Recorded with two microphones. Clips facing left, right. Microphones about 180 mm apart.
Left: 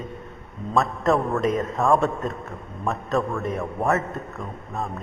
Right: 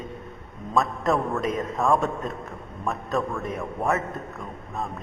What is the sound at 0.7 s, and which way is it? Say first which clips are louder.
A man's voice: left 2 dB; centre (ahead or behind).